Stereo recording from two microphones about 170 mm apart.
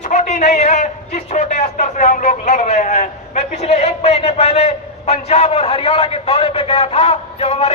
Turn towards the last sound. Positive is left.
turn(degrees=40)  # may be behind; listen again after turning